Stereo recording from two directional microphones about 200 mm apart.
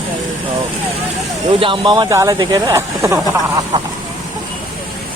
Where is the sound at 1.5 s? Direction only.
25° right (ahead or behind).